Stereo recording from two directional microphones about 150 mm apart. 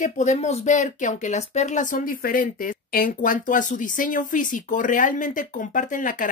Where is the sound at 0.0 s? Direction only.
55° left (ahead or behind).